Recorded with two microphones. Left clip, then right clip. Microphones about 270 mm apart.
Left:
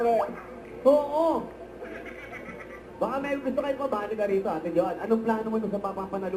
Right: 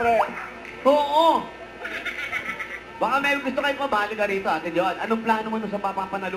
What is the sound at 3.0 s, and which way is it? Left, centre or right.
A man's voice, centre.